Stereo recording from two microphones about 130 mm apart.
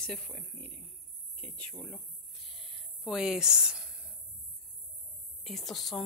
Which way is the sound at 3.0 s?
5° right (ahead or behind).